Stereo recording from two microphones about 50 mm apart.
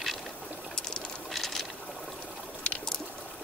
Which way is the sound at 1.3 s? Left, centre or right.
Centre.